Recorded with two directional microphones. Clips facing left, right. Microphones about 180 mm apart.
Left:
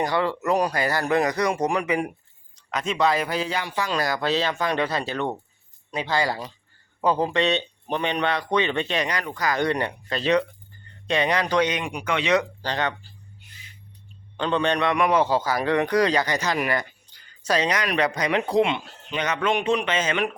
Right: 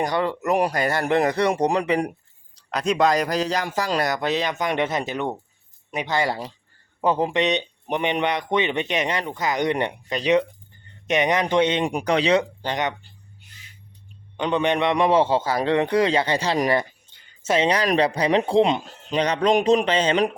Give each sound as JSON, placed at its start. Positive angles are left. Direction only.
{"t": 0.0, "sound": "a man's voice", "side_deg": -20}
{"t": 4.0, "sound": "a man's voice", "side_deg": -20}
{"t": 11.9, "sound": "a man's voice", "side_deg": -40}
{"t": 14.3, "sound": "a man's voice", "side_deg": -15}